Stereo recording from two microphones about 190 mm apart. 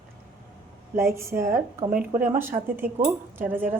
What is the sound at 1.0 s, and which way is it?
A woman's voice, 15° right (ahead or behind).